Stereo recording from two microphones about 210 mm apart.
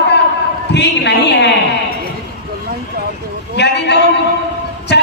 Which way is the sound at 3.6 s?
55° left (ahead or behind).